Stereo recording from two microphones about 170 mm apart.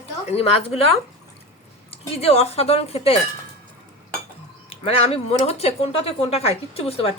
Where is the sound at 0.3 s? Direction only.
35° left (ahead or behind).